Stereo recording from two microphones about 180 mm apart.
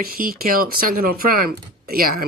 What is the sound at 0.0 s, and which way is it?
Speech, 55° right (ahead or behind).